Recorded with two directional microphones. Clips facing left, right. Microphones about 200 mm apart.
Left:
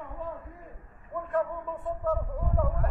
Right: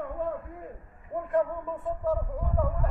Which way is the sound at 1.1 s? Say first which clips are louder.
Right 2 dB; 30° right (ahead or behind).